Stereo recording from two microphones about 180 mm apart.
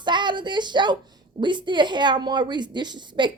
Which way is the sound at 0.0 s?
25° right (ahead or behind).